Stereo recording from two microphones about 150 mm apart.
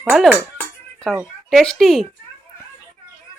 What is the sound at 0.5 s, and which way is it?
Music, 5° left (ahead or behind).